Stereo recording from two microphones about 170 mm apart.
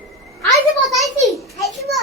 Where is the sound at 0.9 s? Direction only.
Centre (ahead or behind).